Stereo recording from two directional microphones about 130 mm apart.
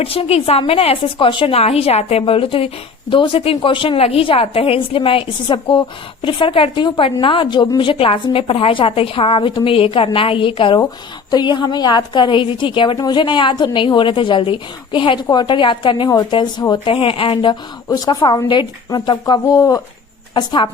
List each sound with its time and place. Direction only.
0.0 s a woman's voice: 45° left (ahead or behind)